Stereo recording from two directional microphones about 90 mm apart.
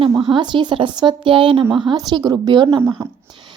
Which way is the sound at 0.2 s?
60° right (ahead or behind).